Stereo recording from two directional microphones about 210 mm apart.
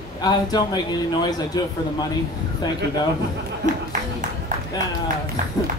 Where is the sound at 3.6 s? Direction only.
40° right (ahead or behind).